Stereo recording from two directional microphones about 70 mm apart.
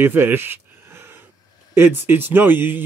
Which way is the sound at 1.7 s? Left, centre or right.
Right.